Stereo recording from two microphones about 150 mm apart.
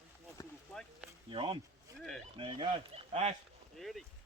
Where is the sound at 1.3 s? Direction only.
40° right (ahead or behind).